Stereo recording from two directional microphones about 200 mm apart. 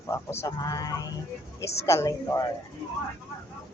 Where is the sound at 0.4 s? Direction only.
20° left (ahead or behind).